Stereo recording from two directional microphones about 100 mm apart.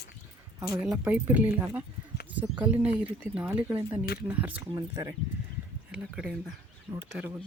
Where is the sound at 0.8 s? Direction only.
15° right (ahead or behind).